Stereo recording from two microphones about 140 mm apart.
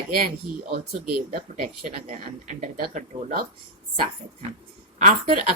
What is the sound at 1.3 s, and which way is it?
Speech, 80° right.